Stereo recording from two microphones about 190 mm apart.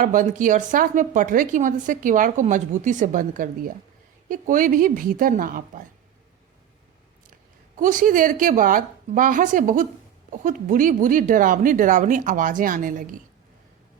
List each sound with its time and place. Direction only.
0.0 s a woman's voice: 45° right (ahead or behind)
7.8 s a woman's voice: 45° right (ahead or behind)